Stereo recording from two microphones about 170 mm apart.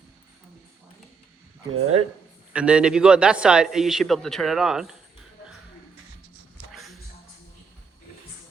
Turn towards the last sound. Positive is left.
turn(degrees=0)  # may be behind; listen again after turning